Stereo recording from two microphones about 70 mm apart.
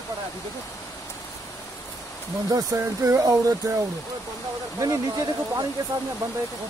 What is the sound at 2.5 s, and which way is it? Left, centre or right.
Speech, right.